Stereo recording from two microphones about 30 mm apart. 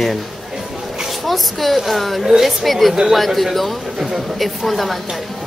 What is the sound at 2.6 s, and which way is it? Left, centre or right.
Speech, centre.